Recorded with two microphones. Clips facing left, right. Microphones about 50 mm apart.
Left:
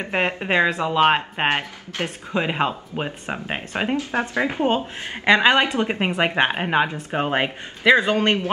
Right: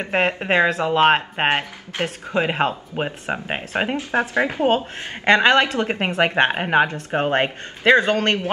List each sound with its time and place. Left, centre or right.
0.1 s speech: centre
1.5 s speech: centre
2.3 s speech: centre
4.1 s speech: right
4.6 s a man's voice: centre